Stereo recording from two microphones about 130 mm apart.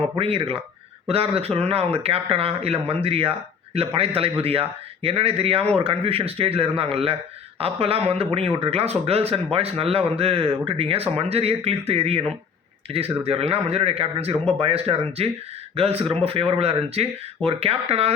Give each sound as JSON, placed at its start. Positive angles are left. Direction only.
{"t": 0.2, "sound": "speech", "side_deg": -50}